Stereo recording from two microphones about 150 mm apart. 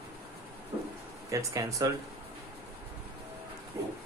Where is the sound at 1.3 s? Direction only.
20° right (ahead or behind).